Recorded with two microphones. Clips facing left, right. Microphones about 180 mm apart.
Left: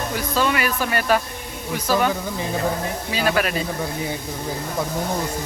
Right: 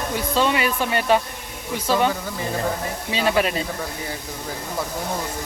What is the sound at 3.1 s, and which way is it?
Speech, 25° right (ahead or behind).